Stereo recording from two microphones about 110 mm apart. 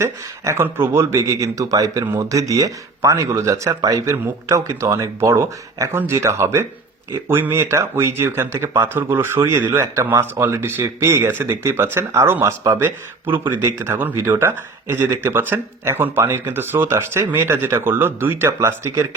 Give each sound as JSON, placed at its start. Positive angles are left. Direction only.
{"t": 0.0, "sound": "speech", "side_deg": -25}